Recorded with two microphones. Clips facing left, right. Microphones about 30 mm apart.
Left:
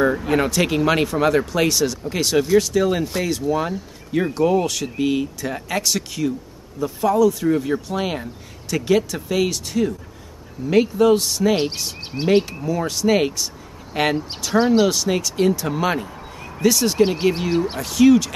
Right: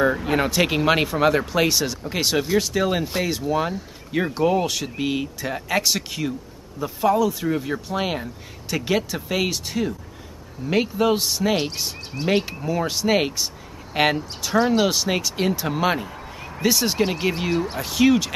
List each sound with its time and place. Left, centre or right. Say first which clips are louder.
0.0 s speech: left 2 dB; centre
12.1 s speech: left 4 dB; centre
12.6 s speech: left 2 dB; centre
14.5 s speech: left 2 dB; centre
14.9 s speech: left 2 dB; centre